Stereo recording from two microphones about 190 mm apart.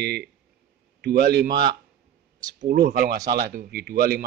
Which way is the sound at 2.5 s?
45° right (ahead or behind).